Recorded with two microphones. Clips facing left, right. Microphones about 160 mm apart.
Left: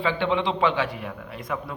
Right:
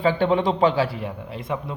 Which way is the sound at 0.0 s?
40° right (ahead or behind).